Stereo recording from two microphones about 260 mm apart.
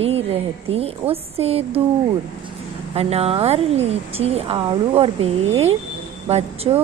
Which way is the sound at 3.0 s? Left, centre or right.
Right.